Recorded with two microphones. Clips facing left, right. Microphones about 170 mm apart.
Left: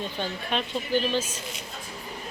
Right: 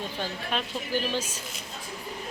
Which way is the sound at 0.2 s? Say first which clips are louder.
Left 2 dB; 10° right (ahead or behind).